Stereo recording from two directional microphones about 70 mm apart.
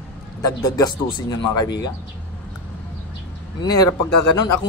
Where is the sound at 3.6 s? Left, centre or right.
Left.